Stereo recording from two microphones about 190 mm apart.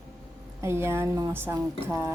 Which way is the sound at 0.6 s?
15° right (ahead or behind).